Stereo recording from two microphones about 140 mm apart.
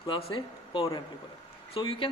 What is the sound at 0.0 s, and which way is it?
Speech, 35° left (ahead or behind).